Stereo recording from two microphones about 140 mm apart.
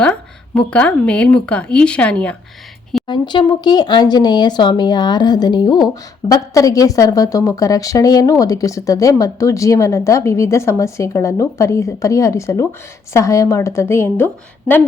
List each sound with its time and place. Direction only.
0.0 s speech: 5° left (ahead or behind)
3.1 s a woman's voice: 30° left (ahead or behind); by 14.3 s 15° left (ahead or behind)